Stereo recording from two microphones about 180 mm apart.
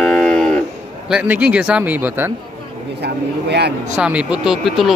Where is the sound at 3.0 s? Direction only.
70° right (ahead or behind).